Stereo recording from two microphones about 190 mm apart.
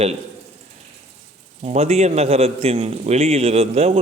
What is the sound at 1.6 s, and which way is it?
A man's voice, 35° right (ahead or behind).